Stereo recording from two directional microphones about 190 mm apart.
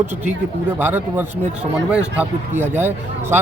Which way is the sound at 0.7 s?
10° right (ahead or behind).